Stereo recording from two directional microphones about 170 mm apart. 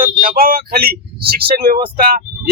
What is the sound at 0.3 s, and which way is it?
Speech, 60° right (ahead or behind).